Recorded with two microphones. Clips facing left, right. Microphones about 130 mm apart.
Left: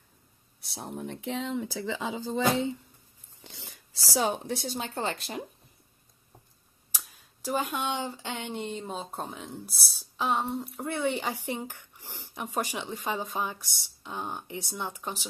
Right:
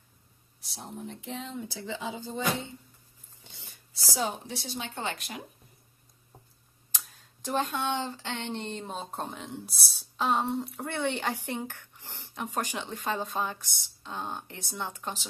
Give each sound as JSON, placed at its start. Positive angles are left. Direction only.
{"t": 0.6, "sound": "speech", "side_deg": 60}
{"t": 3.4, "sound": "a sound", "side_deg": 90}
{"t": 4.5, "sound": "speech", "side_deg": 45}
{"t": 7.4, "sound": "speech", "side_deg": 10}
{"t": 11.4, "sound": "speech", "side_deg": 10}